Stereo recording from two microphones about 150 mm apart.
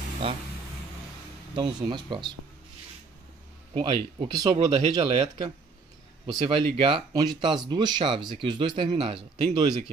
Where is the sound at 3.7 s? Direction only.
30° right (ahead or behind).